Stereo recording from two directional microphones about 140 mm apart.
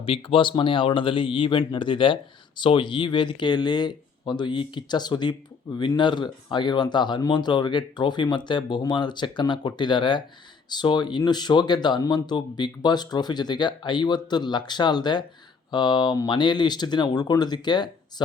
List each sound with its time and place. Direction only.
0.0 s speech: 40° left (ahead or behind)